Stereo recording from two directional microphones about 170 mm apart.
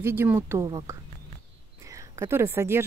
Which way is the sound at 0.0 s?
15° right (ahead or behind).